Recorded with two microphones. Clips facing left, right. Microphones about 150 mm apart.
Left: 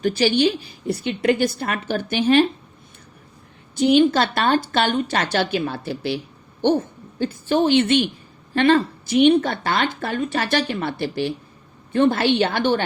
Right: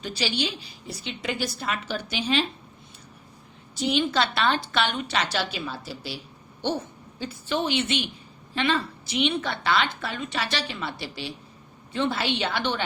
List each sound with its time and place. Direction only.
0.0 s speech: 50° left (ahead or behind)
3.8 s a woman's voice: 55° left (ahead or behind)